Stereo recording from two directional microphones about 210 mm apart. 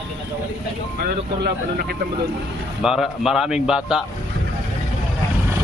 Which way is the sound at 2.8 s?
Centre (ahead or behind).